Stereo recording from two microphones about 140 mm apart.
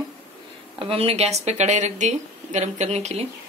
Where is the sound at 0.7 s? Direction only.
45° right (ahead or behind).